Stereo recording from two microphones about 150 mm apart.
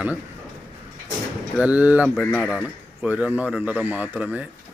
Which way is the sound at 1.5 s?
10° right (ahead or behind).